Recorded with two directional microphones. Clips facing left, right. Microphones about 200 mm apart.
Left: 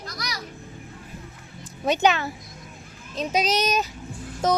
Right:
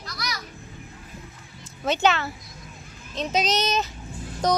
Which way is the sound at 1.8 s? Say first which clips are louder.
Left 1 dB; 15° left (ahead or behind).